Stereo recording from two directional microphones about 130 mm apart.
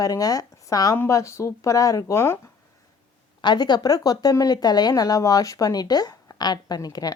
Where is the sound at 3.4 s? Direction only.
35° left (ahead or behind).